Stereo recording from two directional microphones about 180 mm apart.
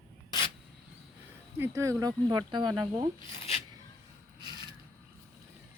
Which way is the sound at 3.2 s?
30° left (ahead or behind).